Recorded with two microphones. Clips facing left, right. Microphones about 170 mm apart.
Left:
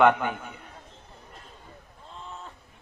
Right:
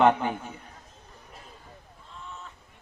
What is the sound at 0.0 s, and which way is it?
Speech, 35° right (ahead or behind).